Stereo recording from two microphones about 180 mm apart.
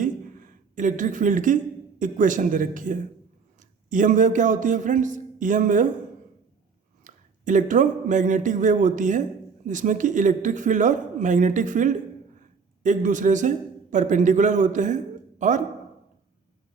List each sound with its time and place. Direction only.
0.0 s a sound: 45° right (ahead or behind)
2.0 s speech: 45° right (ahead or behind)
7.0 s a man's voice: 45° right (ahead or behind)